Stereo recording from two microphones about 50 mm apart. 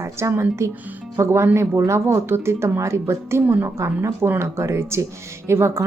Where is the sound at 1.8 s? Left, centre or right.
Right.